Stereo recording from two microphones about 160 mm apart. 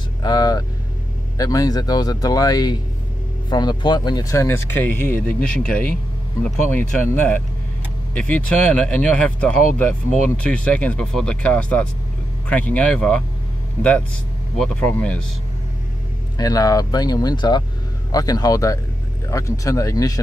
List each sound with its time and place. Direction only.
0.2 s speech: 25° left (ahead or behind); by 13.2 s 5° left (ahead or behind)
14.6 s speech: 10° left (ahead or behind)
16.3 s speech: 20° left (ahead or behind)